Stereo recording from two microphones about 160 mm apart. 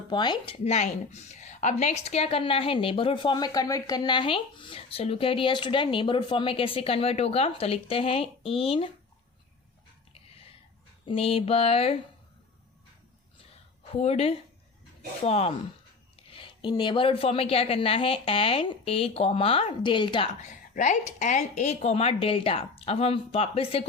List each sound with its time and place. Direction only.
0.1 s speech: 30° left (ahead or behind)
0.6 s a woman's voice: 45° left (ahead or behind)
11.0 s a woman's voice: 35° left (ahead or behind)
13.9 s a woman's voice: 40° left (ahead or behind)
20.4 s a woman's voice: 50° left (ahead or behind)